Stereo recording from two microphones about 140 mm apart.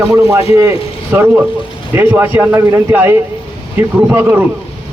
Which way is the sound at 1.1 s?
15° right (ahead or behind).